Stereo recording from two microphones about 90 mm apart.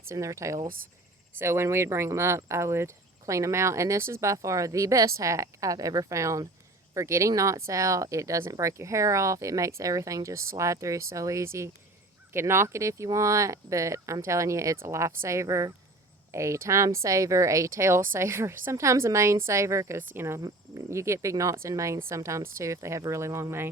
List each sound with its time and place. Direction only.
0.1 s speech: 35° right (ahead or behind)